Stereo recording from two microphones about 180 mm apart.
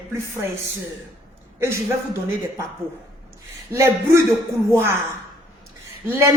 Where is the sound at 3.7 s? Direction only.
15° right (ahead or behind).